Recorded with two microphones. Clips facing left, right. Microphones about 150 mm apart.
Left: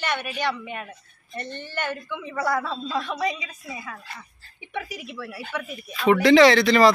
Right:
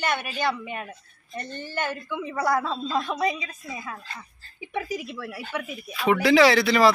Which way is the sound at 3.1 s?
5° right (ahead or behind).